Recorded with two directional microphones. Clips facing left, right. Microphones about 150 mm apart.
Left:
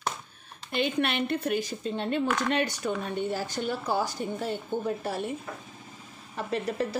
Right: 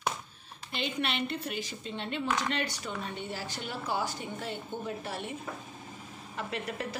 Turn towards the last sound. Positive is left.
turn(degrees=35)  # may be behind; listen again after turning